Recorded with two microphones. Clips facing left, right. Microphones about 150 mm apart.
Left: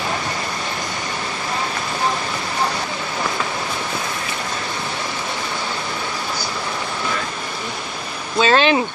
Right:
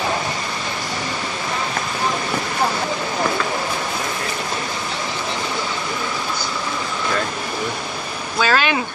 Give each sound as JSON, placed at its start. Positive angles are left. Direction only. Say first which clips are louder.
{"t": 8.4, "sound": "speech", "louder": "left 4 dB", "side_deg": 25}